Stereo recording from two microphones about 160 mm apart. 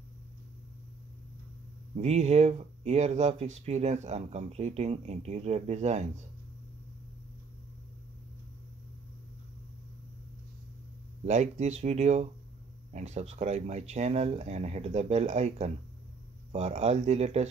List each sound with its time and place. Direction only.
2.0 s speech: 45° right (ahead or behind)
11.2 s speech: 45° right (ahead or behind)